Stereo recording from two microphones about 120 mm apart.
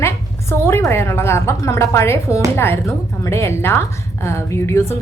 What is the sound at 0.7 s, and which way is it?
A woman's voice, 20° left (ahead or behind).